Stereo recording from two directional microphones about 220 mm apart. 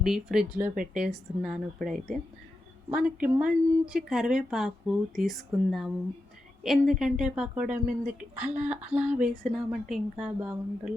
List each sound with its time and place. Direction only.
0.0 s speech: centre (ahead or behind)